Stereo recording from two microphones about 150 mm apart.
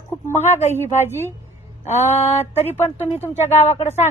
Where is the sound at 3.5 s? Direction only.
45° left (ahead or behind).